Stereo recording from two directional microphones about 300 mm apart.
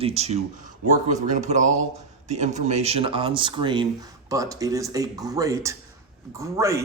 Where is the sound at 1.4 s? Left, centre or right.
Right.